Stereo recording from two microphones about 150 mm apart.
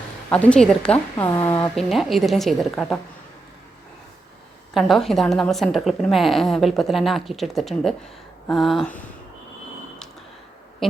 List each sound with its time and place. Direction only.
0.3 s a woman's voice: 10° left (ahead or behind)
1.7 s a woman's voice: centre (ahead or behind)
4.7 s a woman's voice: centre (ahead or behind)